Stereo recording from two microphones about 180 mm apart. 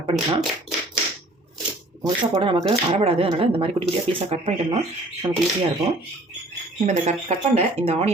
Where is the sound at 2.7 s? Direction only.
35° right (ahead or behind).